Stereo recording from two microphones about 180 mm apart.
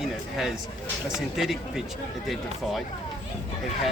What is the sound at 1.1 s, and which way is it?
Speech, centre (ahead or behind).